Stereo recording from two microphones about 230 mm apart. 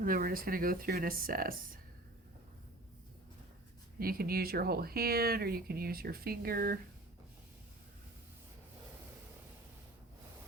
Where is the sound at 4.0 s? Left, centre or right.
Right.